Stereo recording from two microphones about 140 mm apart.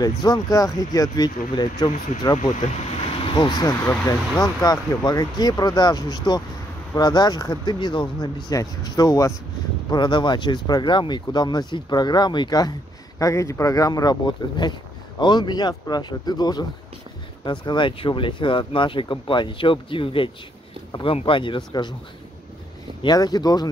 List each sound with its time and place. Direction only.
0.0 s speech: 30° left (ahead or behind)
3.3 s speech: 30° left (ahead or behind)
23.0 s speech: 30° left (ahead or behind)